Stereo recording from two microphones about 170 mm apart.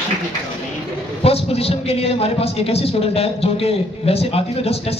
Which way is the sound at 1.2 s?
35° left (ahead or behind).